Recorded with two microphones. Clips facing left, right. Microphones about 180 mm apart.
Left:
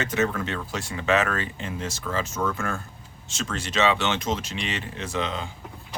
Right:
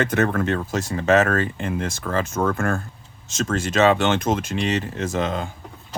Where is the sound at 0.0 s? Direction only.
55° right (ahead or behind).